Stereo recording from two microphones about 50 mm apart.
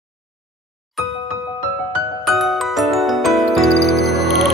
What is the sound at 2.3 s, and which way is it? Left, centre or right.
Music, centre.